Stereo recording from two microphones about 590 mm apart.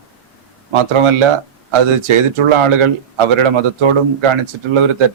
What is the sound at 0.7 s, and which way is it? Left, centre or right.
Speech, right.